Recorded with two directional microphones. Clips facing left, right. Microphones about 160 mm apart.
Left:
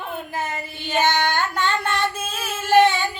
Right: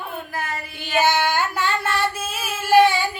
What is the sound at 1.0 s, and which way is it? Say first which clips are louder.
Female singing: right 1 dB; 5° right (ahead or behind).